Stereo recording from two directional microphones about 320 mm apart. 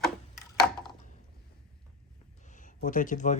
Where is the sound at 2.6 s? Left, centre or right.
Left.